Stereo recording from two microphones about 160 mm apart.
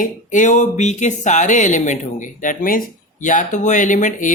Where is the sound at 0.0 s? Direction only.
50° left (ahead or behind).